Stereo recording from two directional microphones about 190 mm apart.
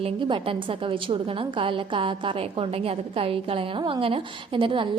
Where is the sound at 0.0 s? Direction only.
25° right (ahead or behind).